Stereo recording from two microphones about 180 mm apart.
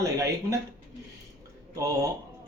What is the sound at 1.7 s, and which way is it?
Speech, 20° right (ahead or behind).